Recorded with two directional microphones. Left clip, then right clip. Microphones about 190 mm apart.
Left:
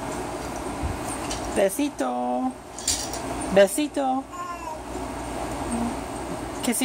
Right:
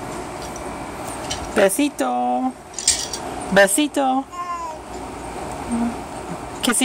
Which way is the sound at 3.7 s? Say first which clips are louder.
Right 6 dB; 15° right (ahead or behind).